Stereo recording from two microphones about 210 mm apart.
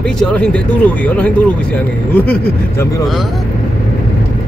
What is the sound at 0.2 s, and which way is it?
Speech, 5° left (ahead or behind).